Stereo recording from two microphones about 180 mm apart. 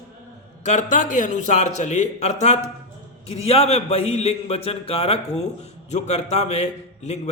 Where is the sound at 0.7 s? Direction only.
45° left (ahead or behind).